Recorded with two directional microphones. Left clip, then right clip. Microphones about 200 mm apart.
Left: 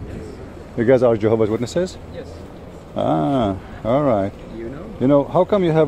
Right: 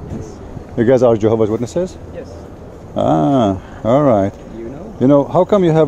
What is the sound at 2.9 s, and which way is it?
Speech, 25° right (ahead or behind).